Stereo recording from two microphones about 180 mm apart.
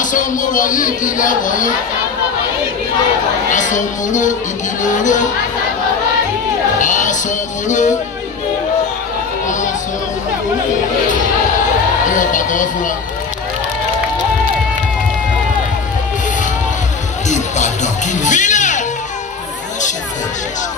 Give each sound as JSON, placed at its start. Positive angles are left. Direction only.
{"t": 0.0, "sound": "speech", "side_deg": 45}
{"t": 3.5, "sound": "speech", "side_deg": 45}
{"t": 6.8, "sound": "music", "side_deg": 45}
{"t": 12.1, "sound": "speech", "side_deg": 45}
{"t": 17.3, "sound": "music", "side_deg": 45}